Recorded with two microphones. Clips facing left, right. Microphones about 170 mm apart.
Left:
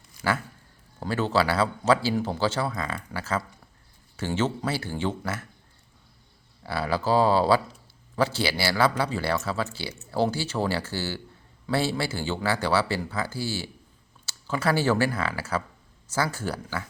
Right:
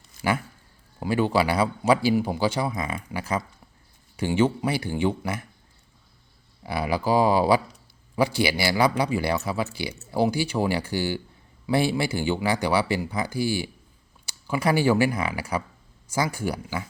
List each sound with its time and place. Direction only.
0.2 s speech: 15° right (ahead or behind)
6.6 s speech: 15° right (ahead or behind)